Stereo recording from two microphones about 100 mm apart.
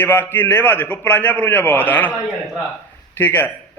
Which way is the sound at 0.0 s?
20° left (ahead or behind).